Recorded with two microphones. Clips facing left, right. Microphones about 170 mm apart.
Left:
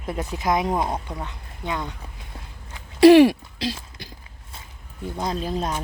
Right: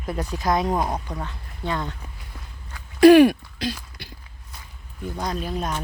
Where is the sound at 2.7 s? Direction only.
25° left (ahead or behind).